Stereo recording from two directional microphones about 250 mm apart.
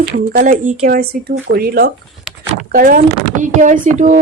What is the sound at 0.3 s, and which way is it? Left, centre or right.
Speech, right.